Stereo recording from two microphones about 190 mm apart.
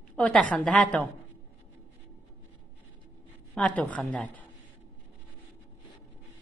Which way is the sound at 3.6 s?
5° left (ahead or behind).